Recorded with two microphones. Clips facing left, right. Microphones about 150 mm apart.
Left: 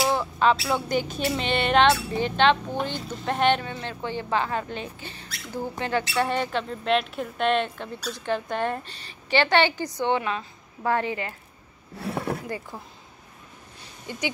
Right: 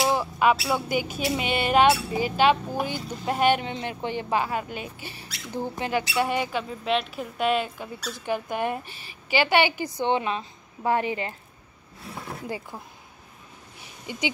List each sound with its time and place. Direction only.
0.0 s speech: 15° right (ahead or behind)
3.6 s a woman's voice: 20° right (ahead or behind)
12.0 s speech: 65° left (ahead or behind)
12.4 s speech: 10° right (ahead or behind)